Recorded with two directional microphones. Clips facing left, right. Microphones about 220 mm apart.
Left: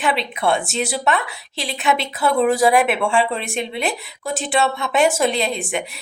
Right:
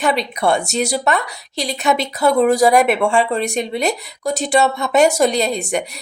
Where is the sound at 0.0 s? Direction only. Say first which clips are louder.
Right 3 dB; 40° right (ahead or behind).